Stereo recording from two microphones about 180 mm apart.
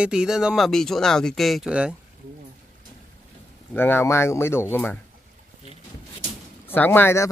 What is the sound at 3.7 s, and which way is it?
Speech, 10° left (ahead or behind).